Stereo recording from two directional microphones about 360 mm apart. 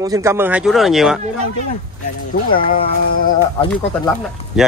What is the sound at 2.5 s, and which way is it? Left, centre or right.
Speech, left.